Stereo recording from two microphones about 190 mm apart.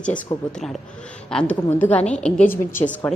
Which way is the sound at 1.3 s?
5° left (ahead or behind).